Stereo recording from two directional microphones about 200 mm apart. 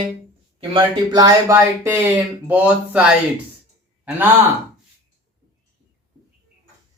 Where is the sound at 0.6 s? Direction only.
25° right (ahead or behind); by 3.2 s 5° right (ahead or behind).